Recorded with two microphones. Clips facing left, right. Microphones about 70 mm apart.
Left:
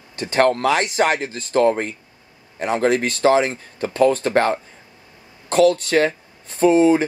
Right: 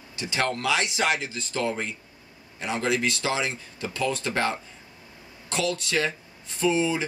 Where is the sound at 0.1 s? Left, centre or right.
Left.